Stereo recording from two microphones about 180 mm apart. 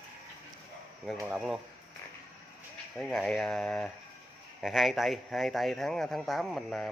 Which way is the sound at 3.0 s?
Centre (ahead or behind).